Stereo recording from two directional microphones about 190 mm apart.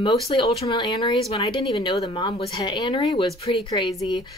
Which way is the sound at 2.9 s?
30° left (ahead or behind).